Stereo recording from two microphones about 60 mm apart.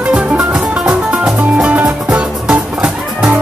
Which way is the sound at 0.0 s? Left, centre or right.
Right.